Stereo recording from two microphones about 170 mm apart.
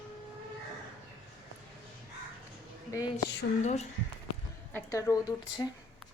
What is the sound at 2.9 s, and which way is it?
Speech, 20° left (ahead or behind).